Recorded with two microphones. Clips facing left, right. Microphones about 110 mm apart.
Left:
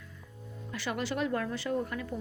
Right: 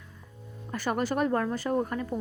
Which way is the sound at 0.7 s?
45° right (ahead or behind).